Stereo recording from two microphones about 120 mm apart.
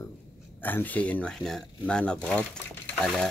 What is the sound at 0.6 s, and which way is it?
Speech, 15° left (ahead or behind).